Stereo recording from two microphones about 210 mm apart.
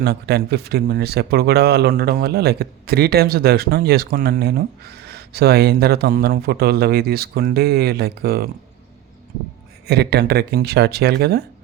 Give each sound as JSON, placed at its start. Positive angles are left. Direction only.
{"t": 0.0, "sound": "speech", "side_deg": -50}
{"t": 9.8, "sound": "speech", "side_deg": -50}